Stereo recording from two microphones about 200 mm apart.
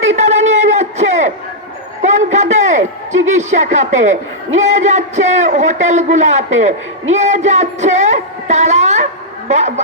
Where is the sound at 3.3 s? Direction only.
35° right (ahead or behind).